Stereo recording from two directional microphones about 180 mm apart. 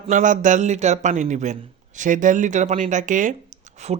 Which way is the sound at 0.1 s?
45° right (ahead or behind).